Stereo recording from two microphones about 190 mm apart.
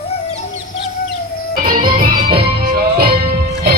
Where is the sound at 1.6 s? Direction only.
50° right (ahead or behind).